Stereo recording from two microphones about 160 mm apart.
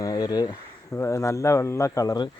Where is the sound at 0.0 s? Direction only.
25° left (ahead or behind).